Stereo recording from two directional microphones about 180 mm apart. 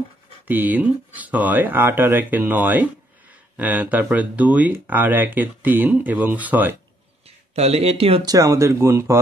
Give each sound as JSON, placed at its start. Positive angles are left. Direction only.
{"t": 0.5, "sound": "speech", "side_deg": -10}
{"t": 7.5, "sound": "speech", "side_deg": -35}
{"t": 8.3, "sound": "speech", "side_deg": -15}